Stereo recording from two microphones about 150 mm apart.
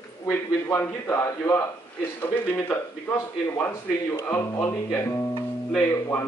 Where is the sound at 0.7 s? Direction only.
15° left (ahead or behind).